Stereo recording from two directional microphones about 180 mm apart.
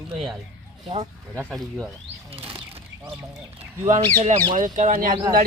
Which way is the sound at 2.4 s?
30° right (ahead or behind).